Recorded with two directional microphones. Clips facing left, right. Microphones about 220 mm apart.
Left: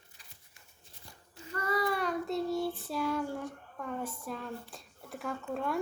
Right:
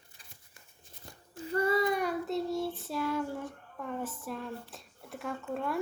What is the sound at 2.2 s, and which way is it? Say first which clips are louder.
Child singing: even; centre (ahead or behind).